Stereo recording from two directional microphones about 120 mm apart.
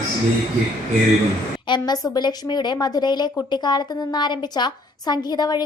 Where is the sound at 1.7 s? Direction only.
35° left (ahead or behind).